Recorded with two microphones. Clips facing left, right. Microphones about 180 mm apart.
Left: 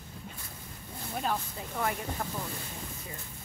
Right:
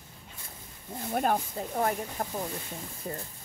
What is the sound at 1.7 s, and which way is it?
Speech, 40° right (ahead or behind).